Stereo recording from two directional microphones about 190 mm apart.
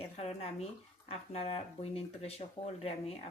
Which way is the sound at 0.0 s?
30° left (ahead or behind).